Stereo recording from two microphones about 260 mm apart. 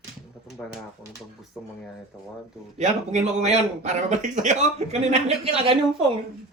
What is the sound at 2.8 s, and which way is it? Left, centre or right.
A man's voice, right.